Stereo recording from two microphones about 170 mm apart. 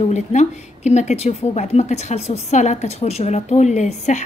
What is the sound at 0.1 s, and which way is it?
Speech, 45° left (ahead or behind).